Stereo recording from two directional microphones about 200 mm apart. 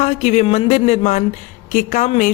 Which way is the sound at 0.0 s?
30° left (ahead or behind).